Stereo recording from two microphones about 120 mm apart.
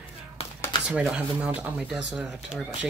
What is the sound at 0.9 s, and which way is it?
Speech, 5° right (ahead or behind).